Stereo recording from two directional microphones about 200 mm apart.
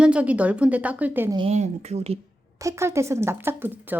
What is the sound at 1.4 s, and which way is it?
Speech, 30° right (ahead or behind).